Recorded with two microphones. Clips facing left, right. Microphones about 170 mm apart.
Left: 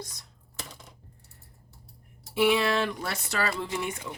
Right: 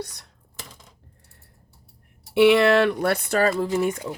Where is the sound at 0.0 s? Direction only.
65° right (ahead or behind).